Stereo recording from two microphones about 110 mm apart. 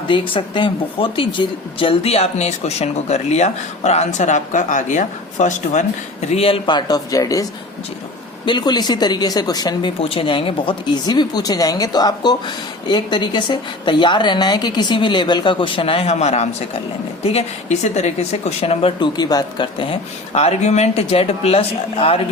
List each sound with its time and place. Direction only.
0.1 s speech: 50° left (ahead or behind); by 5.8 s 90° left
6.3 s speech: 60° left (ahead or behind)
6.7 s speech: 40° left (ahead or behind)
8.4 s speech: 40° left (ahead or behind)
10.0 s a woman's voice: 55° left (ahead or behind)
11.0 s a woman's voice: 40° left (ahead or behind); by 18.9 s 65° left (ahead or behind)
18.9 s speech: 40° left (ahead or behind)
19.9 s speech: 75° left (ahead or behind)